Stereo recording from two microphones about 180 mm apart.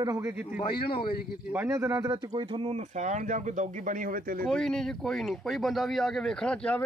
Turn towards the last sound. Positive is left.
turn(degrees=5)  # may be behind; listen again after turning